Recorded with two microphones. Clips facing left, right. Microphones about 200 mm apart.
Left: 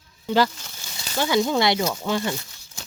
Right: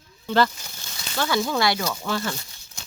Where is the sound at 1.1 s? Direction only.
20° left (ahead or behind).